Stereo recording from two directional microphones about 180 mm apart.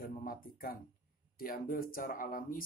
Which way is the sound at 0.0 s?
55° left (ahead or behind).